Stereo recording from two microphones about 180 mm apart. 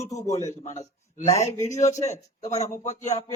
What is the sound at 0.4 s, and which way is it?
Speech, 40° left (ahead or behind).